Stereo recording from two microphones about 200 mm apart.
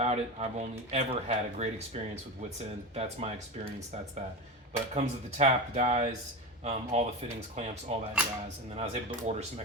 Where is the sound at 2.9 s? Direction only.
35° right (ahead or behind).